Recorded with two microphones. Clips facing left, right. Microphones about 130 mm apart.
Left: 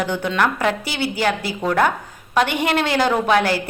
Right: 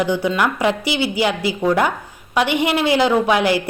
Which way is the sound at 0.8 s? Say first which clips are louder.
Right 4 dB; 50° left (ahead or behind).